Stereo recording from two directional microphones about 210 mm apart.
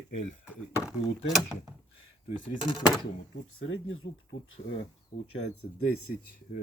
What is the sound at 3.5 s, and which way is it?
Speech, 75° left (ahead or behind).